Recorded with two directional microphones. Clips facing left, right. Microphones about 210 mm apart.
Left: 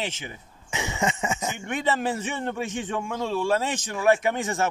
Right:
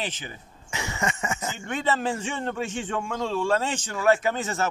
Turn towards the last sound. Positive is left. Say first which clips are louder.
# left 1 dB
turn(degrees=15)  # may be behind; listen again after turning